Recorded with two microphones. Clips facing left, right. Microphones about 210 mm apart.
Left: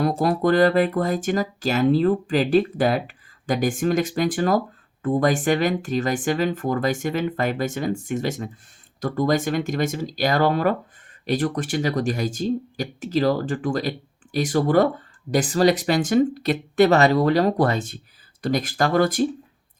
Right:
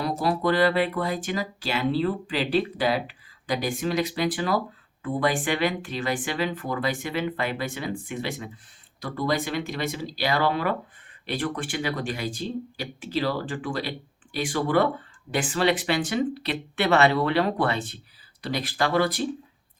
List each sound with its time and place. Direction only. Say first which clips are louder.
0.0 s speech: left 5 dB; 50° left (ahead or behind)